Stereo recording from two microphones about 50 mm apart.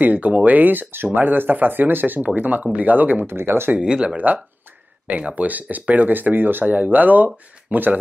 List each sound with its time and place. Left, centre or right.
0.0 s speech: right
3.3 s speech: right
3.8 s speech: centre
5.0 s speech: right